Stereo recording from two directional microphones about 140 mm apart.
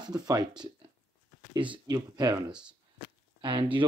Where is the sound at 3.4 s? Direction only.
35° right (ahead or behind).